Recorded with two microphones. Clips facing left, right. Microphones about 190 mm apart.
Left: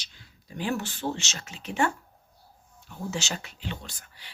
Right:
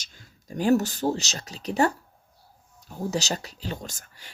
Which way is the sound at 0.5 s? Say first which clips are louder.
Right 9 dB; 40° right (ahead or behind).